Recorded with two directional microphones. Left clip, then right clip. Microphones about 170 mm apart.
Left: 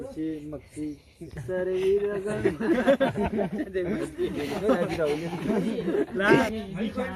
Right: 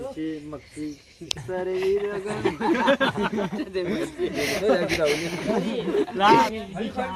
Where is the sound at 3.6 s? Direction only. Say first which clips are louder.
Right 2 dB; 25° right (ahead or behind).